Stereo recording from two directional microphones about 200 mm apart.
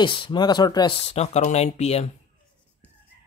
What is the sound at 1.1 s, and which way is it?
Speech, 35° left (ahead or behind).